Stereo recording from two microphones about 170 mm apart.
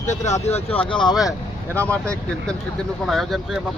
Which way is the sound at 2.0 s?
5° left (ahead or behind).